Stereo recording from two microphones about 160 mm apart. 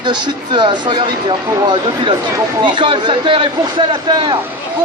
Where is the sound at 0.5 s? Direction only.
30° right (ahead or behind).